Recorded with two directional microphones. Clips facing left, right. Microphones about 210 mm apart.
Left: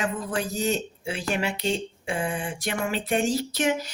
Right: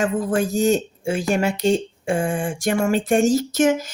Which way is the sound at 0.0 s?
45° right (ahead or behind).